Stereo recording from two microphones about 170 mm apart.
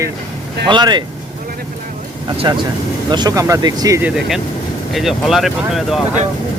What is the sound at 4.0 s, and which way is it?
Speech, centre (ahead or behind).